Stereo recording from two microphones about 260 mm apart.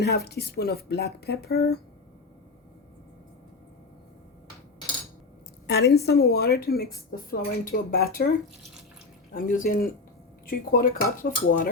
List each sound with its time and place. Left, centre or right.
0.0 s a woman's voice: left
5.6 s a woman's voice: left
9.3 s a woman's voice: left